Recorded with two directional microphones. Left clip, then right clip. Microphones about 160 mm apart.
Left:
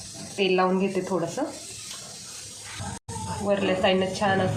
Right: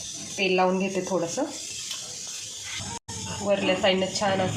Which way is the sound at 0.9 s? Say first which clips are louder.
Even; 10° right (ahead or behind).